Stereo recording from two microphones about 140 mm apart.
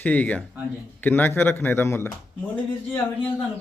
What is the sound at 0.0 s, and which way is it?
Speech, 10° left (ahead or behind).